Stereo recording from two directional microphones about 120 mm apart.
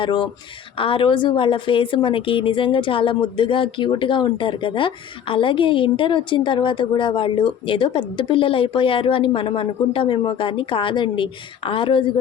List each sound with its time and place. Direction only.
0.0 s a woman's voice: 45° left (ahead or behind)